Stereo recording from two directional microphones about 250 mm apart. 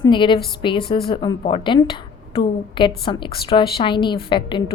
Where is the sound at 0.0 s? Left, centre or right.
Centre.